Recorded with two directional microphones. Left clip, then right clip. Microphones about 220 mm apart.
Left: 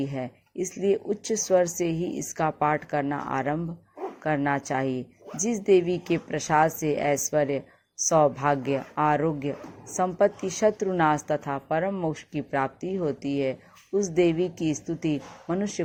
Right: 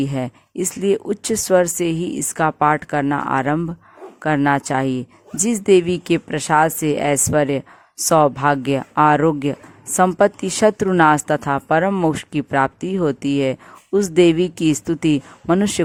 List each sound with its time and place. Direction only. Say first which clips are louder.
0.0 s speech: right 8 dB; 40° right (ahead or behind)